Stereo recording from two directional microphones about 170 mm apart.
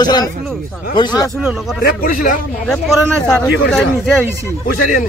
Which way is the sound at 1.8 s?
55° left (ahead or behind).